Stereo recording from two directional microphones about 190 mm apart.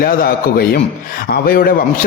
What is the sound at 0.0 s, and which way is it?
A man's voice, 50° left (ahead or behind).